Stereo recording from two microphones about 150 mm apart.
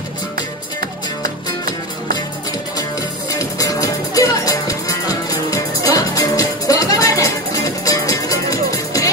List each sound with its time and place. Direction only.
3.0 s music: 25° left (ahead or behind)